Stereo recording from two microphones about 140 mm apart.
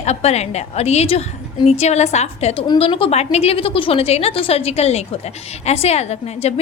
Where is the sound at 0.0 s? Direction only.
50° left (ahead or behind).